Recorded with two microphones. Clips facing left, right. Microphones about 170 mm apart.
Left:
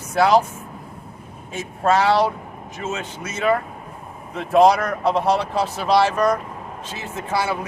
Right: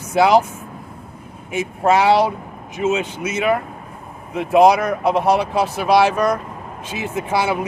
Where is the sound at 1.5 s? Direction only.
15° right (ahead or behind).